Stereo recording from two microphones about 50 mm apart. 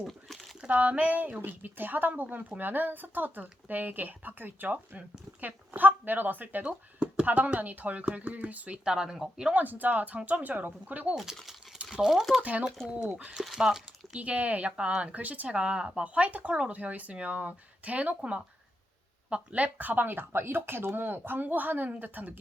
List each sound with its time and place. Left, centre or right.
0.1 s crumpling: centre
0.7 s speech: right
8.8 s speech: centre
9.6 s speech: right
11.9 s speech: centre
12.4 s speech: right
13.6 s a sound: centre
14.2 s speech: right